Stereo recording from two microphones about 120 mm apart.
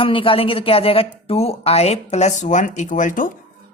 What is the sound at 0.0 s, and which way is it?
Speech, 50° left (ahead or behind).